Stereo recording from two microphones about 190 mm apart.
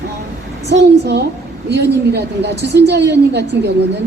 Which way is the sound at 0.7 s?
65° right (ahead or behind).